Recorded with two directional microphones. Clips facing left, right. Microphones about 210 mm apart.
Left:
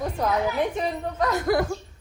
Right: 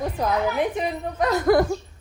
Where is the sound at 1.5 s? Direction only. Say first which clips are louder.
Right 6 dB; 55° right (ahead or behind).